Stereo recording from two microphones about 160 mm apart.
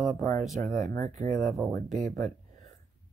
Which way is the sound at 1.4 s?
Centre (ahead or behind).